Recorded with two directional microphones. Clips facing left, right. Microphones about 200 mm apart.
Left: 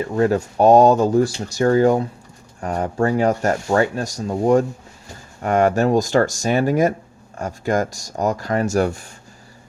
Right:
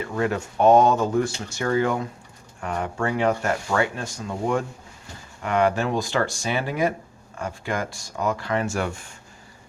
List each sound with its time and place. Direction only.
0.0 s speech: 35° left (ahead or behind)